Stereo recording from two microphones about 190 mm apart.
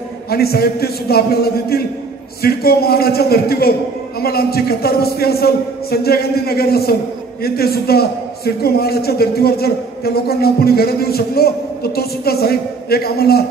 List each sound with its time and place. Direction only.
0.3 s a man's voice: 55° left (ahead or behind)